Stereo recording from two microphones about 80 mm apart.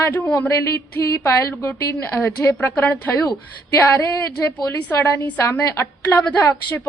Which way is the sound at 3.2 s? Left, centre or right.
Left.